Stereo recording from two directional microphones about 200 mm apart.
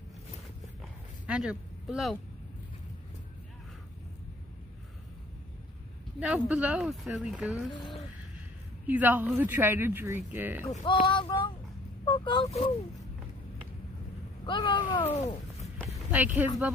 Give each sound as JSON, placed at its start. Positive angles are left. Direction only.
{"t": 1.2, "sound": "speech", "side_deg": -5}
{"t": 6.1, "sound": "speech", "side_deg": -5}
{"t": 8.8, "sound": "speech", "side_deg": -10}
{"t": 10.8, "sound": "speech", "side_deg": 25}
{"t": 12.0, "sound": "a sound", "side_deg": 25}
{"t": 12.4, "sound": "speech", "side_deg": 30}
{"t": 14.4, "sound": "speech", "side_deg": 25}
{"t": 16.1, "sound": "speech", "side_deg": -10}